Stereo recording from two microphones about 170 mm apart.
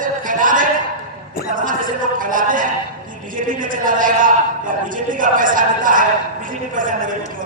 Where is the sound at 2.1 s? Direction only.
50° right (ahead or behind).